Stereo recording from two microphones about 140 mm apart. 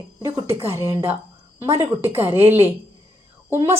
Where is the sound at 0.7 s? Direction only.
20° right (ahead or behind).